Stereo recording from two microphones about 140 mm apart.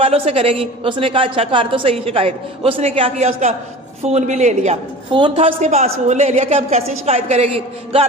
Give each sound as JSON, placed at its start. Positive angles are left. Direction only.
{"t": 0.0, "sound": "a woman's voice", "side_deg": -45}
{"t": 5.1, "sound": "a woman's voice", "side_deg": -40}